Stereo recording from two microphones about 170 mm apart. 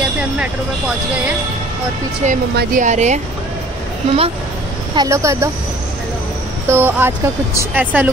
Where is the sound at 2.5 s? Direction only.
70° right (ahead or behind).